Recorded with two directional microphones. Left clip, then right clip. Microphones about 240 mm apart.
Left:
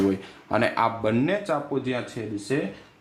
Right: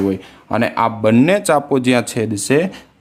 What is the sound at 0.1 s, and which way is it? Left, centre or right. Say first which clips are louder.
Speech: right 5 dB; right.